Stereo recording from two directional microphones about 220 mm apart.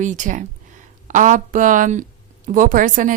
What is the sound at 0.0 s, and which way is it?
Speech, 35° right (ahead or behind).